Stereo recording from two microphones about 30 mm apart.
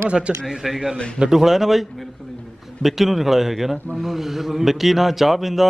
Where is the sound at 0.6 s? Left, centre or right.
Centre.